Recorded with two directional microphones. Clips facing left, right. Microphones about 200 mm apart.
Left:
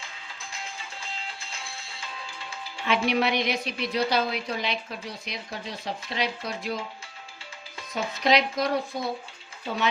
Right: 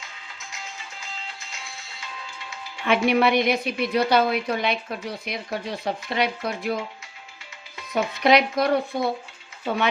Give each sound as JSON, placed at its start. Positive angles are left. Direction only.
{"t": 2.8, "sound": "a woman's voice", "side_deg": -55}
{"t": 7.9, "sound": "a woman's voice", "side_deg": -60}